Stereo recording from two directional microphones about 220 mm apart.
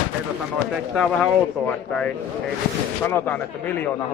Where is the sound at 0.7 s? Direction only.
5° left (ahead or behind).